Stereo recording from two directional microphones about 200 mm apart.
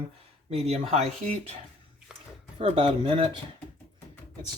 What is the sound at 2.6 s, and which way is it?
Speech, 30° right (ahead or behind).